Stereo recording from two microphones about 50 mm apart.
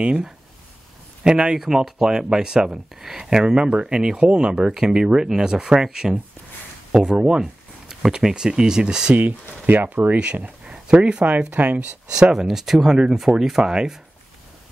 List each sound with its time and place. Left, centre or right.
1.2 s speech: centre
9.1 s speech: right
10.6 s a sound: centre
11.5 s speech: right
12.1 s speech: centre